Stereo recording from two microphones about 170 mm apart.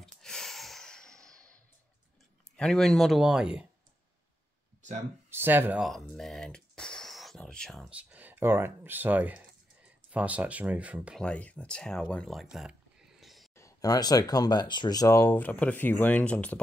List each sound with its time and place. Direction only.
0.0 s a sound: 5° left (ahead or behind)
2.5 s speech: 5° left (ahead or behind)
5.3 s speech: 10° right (ahead or behind)
5.9 s speech: centre (ahead or behind)
11.1 s speech: 5° left (ahead or behind)
13.2 s a sound: centre (ahead or behind)
13.6 s speech: 20° left (ahead or behind)